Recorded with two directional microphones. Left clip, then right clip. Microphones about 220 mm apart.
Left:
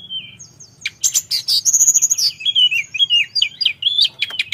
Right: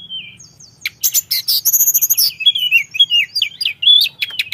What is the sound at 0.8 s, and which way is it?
Bird, 10° right (ahead or behind).